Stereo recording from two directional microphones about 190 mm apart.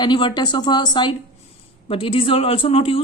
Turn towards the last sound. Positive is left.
turn(degrees=30)  # may be behind; listen again after turning